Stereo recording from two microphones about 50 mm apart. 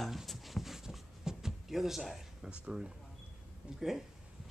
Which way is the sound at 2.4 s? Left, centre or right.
Centre.